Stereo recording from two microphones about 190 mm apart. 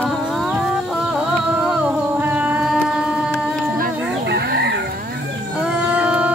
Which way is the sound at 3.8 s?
55° right (ahead or behind).